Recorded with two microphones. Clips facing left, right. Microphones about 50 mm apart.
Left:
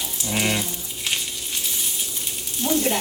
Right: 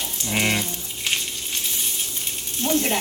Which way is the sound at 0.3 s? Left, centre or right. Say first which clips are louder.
Right 1 dB; centre.